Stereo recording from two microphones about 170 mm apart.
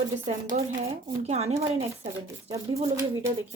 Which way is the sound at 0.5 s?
40° right (ahead or behind).